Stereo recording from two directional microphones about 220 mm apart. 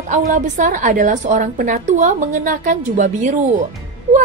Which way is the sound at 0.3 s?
35° right (ahead or behind).